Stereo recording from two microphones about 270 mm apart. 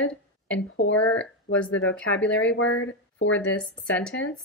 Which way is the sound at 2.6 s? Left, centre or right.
Left.